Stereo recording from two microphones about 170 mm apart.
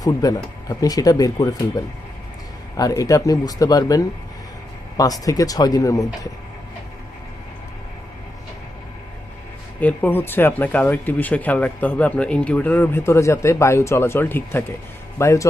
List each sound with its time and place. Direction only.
0.0 s speech: 20° left (ahead or behind)
9.8 s speech: 10° left (ahead or behind)